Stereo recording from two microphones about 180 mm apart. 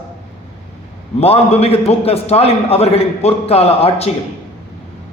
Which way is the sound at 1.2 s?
35° left (ahead or behind).